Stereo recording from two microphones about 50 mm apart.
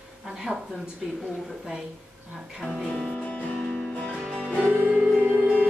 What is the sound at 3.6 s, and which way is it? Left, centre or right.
Music, centre.